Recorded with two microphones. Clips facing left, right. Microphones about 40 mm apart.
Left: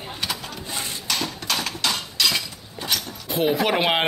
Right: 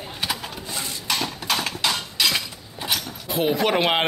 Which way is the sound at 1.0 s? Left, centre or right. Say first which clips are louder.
Right 2 dB; centre.